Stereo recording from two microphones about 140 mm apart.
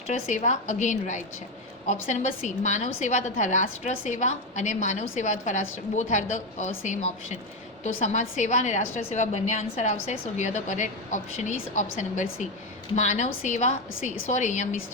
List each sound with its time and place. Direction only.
0.1 s a woman's voice: 60° left (ahead or behind)